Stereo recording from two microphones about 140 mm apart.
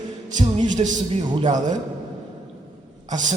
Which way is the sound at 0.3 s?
60° right (ahead or behind).